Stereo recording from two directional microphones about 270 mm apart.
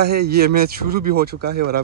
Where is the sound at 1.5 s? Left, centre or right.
Right.